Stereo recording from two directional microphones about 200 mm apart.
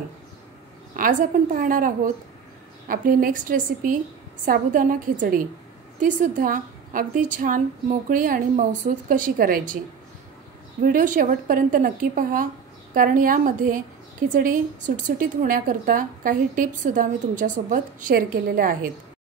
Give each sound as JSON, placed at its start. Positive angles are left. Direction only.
{"t": 0.9, "sound": "a woman's voice", "side_deg": -45}
{"t": 10.8, "sound": "a woman's voice", "side_deg": -40}